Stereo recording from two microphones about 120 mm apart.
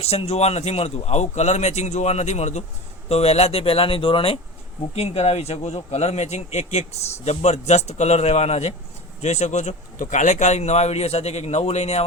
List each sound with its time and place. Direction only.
0.0 s speech: 60° left (ahead or behind)
3.1 s speech: 60° left (ahead or behind)
4.9 s a man's voice: 60° left (ahead or behind)